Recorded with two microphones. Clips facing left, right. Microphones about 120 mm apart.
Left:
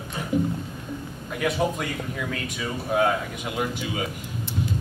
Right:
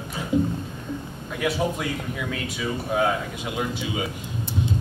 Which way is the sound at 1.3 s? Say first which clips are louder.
Even; centre (ahead or behind).